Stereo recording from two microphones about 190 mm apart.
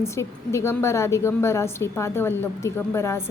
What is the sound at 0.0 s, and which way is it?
A woman's voice, 15° left (ahead or behind).